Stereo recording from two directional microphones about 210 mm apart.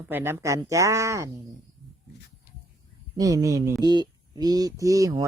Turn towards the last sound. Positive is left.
turn(degrees=-15)  # may be behind; listen again after turning